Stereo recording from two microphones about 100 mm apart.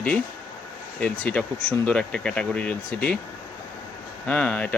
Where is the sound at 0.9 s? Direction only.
15° left (ahead or behind).